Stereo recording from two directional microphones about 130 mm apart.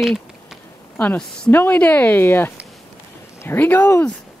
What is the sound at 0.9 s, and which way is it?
Speech, 10° left (ahead or behind).